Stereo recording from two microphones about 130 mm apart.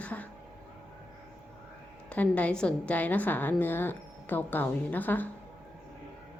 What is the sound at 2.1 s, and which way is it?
A woman's voice, 10° left (ahead or behind).